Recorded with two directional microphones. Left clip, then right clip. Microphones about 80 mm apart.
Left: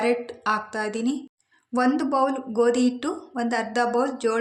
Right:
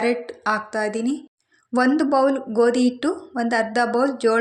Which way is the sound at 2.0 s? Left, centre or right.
Right.